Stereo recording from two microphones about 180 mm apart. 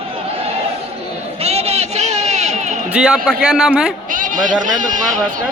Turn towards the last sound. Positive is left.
turn(degrees=-45)  # may be behind; listen again after turning